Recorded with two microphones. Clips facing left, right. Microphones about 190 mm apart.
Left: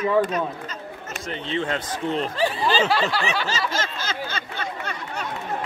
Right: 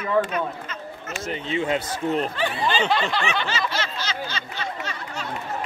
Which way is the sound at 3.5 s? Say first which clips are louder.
Left 1 dB; 45° left (ahead or behind).